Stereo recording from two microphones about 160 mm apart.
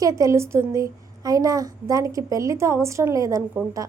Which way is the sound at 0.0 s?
20° right (ahead or behind).